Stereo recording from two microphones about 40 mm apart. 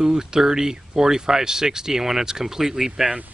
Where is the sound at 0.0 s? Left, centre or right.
Centre.